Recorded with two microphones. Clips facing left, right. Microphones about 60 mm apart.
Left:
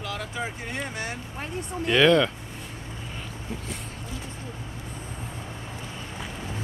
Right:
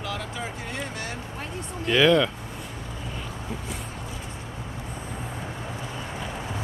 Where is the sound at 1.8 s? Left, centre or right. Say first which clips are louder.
Even; centre.